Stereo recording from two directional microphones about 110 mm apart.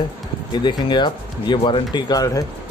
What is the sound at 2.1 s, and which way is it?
Speech, 35° left (ahead or behind).